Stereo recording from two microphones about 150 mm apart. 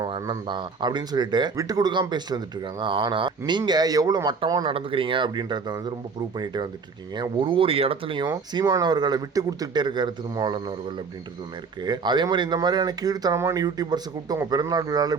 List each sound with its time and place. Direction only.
0.0 s speech: 30° right (ahead or behind)
8.5 s speech: 25° right (ahead or behind)
11.8 s speech: 30° right (ahead or behind)